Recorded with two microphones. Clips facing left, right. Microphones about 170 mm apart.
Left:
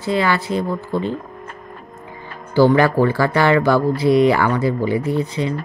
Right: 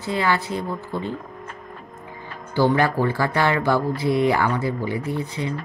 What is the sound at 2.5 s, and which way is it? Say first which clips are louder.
Speech: left 6 dB; 90° left.